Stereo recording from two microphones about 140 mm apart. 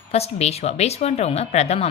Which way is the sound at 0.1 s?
50° left (ahead or behind).